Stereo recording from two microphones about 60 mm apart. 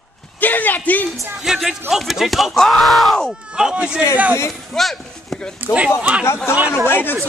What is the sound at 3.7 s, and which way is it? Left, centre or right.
Speech, centre.